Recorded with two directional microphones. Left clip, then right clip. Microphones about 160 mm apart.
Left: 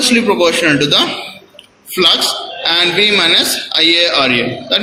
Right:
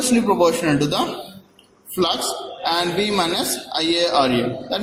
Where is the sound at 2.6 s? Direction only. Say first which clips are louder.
Left 9 dB; 40° right (ahead or behind).